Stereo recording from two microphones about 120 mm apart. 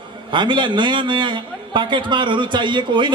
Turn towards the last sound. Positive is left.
turn(degrees=-40)  # may be behind; listen again after turning